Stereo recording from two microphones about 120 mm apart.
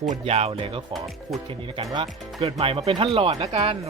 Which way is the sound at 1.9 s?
50° right (ahead or behind).